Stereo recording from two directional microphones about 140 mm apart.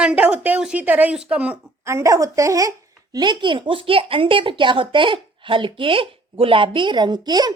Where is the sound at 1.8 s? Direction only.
20° right (ahead or behind).